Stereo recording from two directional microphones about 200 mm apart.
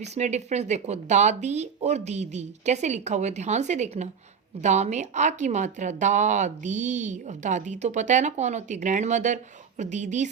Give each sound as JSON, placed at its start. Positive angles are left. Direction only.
{"t": 0.0, "sound": "speech", "side_deg": -35}